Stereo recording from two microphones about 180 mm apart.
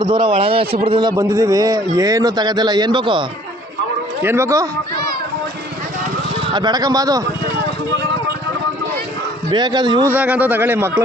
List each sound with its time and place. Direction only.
0.0 s a man's voice: 25° right (ahead or behind)
4.2 s a man's voice: 15° right (ahead or behind)
6.5 s a man's voice: 25° right (ahead or behind)
9.5 s a man's voice: 25° right (ahead or behind)
10.1 s a man's voice: 10° right (ahead or behind)